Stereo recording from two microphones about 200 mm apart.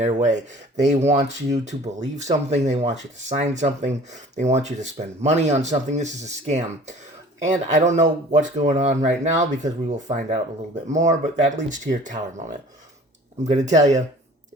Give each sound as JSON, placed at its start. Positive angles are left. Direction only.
{"t": 0.0, "sound": "speech", "side_deg": -35}
{"t": 13.7, "sound": "speech", "side_deg": -35}